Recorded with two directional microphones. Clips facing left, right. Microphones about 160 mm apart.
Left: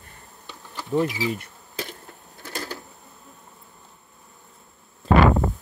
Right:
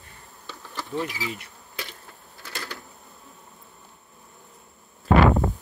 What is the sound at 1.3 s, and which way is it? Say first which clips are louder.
Bee: left 7 dB; 45° left (ahead or behind).